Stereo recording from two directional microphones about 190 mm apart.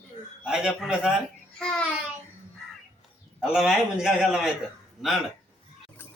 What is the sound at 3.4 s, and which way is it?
Speech, centre (ahead or behind).